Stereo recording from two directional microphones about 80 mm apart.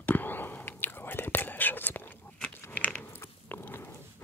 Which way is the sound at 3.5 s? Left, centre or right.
Left.